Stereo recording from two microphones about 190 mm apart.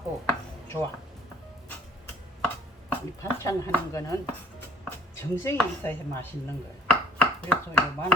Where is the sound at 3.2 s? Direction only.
15° left (ahead or behind).